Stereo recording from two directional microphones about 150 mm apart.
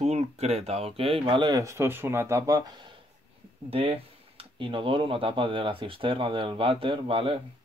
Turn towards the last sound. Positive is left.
turn(degrees=-35)  # may be behind; listen again after turning